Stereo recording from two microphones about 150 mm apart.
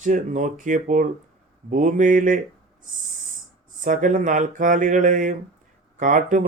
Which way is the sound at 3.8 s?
60° right (ahead or behind).